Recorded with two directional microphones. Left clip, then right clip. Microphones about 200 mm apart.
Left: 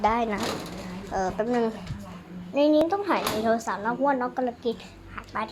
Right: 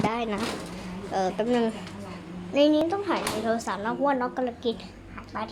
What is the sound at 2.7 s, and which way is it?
Speech, centre (ahead or behind).